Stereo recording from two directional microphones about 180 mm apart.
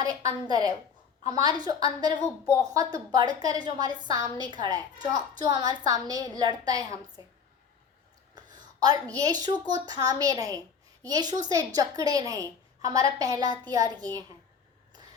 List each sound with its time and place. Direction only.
0.0 s a woman's voice: 20° right (ahead or behind)
8.4 s a woman's voice: 20° right (ahead or behind)